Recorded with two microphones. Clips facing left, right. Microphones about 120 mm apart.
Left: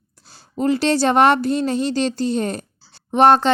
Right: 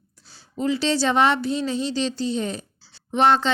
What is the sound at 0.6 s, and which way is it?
A woman's voice, 50° left (ahead or behind).